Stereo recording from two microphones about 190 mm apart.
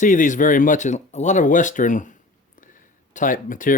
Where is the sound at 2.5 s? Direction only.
45° left (ahead or behind).